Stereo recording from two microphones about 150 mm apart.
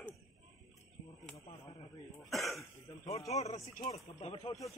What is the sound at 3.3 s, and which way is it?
Speech, 45° left (ahead or behind).